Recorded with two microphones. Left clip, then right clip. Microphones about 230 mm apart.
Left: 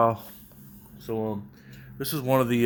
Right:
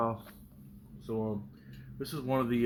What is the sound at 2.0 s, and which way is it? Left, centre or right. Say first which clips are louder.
Speech: left 8 dB; left.